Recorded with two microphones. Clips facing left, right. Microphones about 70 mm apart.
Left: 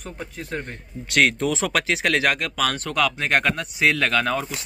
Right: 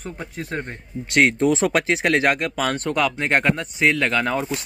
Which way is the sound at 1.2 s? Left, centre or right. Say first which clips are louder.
Right 3 dB; right.